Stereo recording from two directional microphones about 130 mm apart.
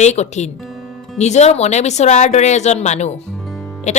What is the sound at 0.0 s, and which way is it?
A woman's voice, 60° left (ahead or behind).